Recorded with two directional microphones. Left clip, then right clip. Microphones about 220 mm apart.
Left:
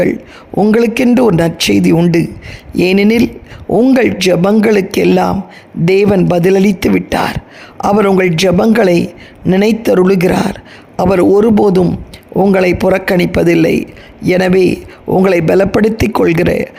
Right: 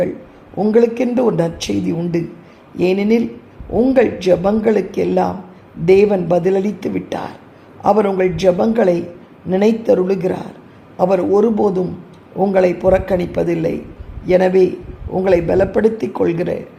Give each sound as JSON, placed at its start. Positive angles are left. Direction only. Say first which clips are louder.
{"t": 0.5, "sound": "a man's voice", "louder": "left 3 dB", "side_deg": 50}